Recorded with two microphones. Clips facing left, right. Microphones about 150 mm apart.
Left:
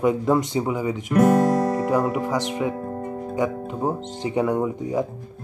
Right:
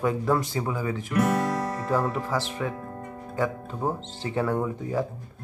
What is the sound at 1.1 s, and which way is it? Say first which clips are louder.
Speech: left 8 dB; 40° left (ahead or behind).